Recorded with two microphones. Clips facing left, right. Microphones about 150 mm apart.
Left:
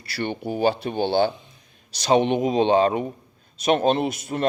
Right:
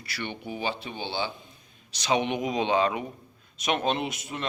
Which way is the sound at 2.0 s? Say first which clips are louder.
Left 7 dB; 35° left (ahead or behind).